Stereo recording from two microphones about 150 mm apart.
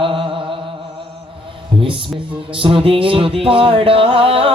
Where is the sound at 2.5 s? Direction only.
35° right (ahead or behind).